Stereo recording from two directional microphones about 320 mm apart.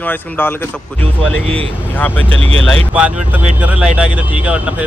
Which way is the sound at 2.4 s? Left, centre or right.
Centre.